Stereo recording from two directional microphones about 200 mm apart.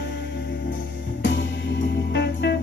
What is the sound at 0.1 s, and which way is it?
Music, 55° left (ahead or behind).